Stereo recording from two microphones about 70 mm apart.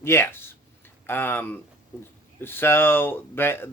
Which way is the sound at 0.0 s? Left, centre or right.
Left.